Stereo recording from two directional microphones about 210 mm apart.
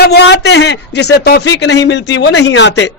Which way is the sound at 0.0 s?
55° left (ahead or behind).